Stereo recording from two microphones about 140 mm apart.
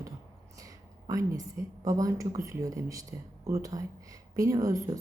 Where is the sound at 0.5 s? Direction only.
25° right (ahead or behind).